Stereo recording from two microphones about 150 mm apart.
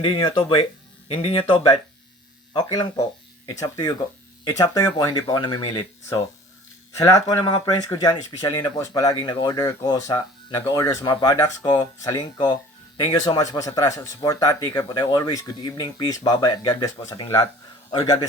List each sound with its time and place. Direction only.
0.0 s speech: 30° left (ahead or behind)
6.9 s speech: 20° left (ahead or behind)